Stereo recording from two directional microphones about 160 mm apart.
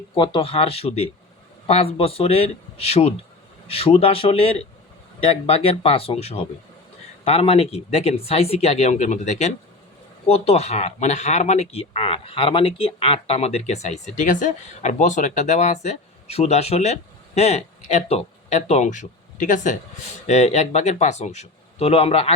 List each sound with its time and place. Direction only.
0.1 s speech: 30° left (ahead or behind)